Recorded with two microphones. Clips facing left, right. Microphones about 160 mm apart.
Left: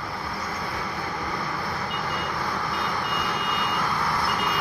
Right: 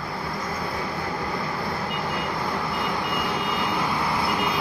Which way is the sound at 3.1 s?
10° right (ahead or behind).